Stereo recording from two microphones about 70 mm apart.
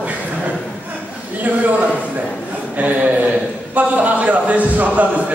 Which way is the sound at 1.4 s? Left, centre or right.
Right.